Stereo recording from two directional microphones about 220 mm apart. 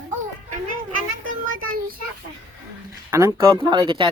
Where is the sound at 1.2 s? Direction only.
40° right (ahead or behind).